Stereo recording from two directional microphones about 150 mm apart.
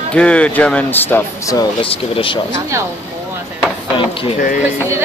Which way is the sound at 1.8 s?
35° left (ahead or behind).